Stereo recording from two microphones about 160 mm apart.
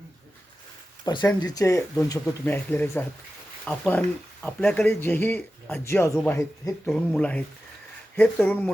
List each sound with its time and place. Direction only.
1.0 s a man's voice: 25° left (ahead or behind); by 8.7 s 10° left (ahead or behind)